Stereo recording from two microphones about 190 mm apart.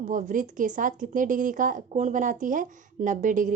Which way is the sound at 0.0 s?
45° right (ahead or behind).